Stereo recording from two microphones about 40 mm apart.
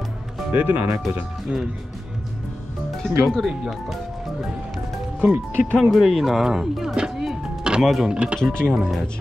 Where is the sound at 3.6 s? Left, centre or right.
Centre.